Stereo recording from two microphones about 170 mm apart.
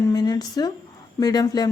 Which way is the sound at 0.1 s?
20° left (ahead or behind).